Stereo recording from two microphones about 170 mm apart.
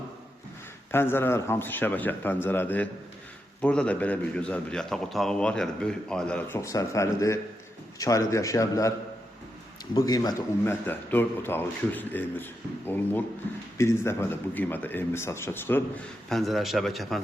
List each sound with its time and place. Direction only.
0.9 s a man's voice: 15° left (ahead or behind)
6.6 s a man's voice: 20° left (ahead or behind)
10.0 s a man's voice: 20° left (ahead or behind)
16.3 s a man's voice: centre (ahead or behind)